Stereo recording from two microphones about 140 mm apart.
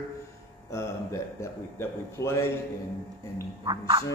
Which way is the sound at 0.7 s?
20° left (ahead or behind).